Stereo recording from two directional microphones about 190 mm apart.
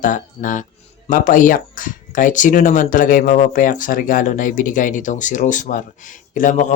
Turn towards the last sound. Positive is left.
turn(degrees=40)  # may be behind; listen again after turning